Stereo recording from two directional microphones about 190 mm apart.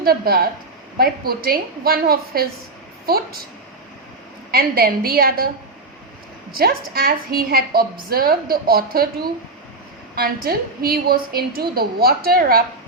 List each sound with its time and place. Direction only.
0.0 s a woman's voice: 55° right (ahead or behind)
4.5 s a woman's voice: 50° right (ahead or behind)
6.5 s a woman's voice: 55° right (ahead or behind)